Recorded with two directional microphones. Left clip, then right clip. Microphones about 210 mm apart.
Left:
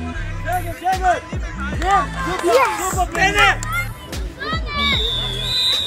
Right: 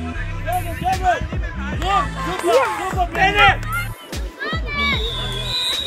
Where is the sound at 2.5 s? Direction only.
55° left (ahead or behind).